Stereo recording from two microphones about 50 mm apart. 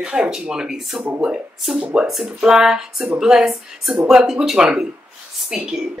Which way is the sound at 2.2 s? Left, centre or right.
Centre.